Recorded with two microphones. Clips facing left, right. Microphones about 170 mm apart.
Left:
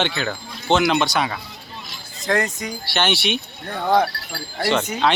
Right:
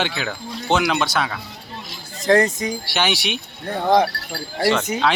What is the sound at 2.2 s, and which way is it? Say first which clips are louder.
Speech: right 6 dB; 25° right (ahead or behind).